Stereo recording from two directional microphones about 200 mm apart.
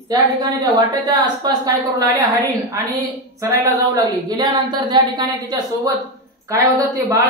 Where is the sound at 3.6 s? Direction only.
20° right (ahead or behind).